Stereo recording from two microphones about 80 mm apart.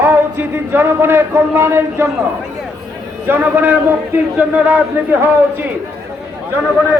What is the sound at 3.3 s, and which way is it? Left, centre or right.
A man's voice, right.